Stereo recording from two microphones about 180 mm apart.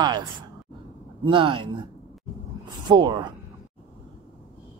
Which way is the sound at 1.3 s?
30° right (ahead or behind).